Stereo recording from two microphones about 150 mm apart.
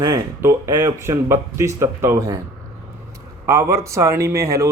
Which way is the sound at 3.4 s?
20° right (ahead or behind).